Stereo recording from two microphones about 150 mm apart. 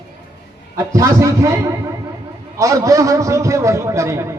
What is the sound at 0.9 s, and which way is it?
A man's voice, 20° right (ahead or behind).